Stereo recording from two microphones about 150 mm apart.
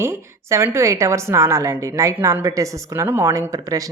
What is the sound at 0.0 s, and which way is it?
Speech, 20° right (ahead or behind).